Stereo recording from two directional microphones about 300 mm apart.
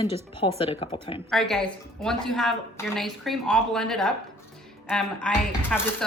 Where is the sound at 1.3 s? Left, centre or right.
Centre.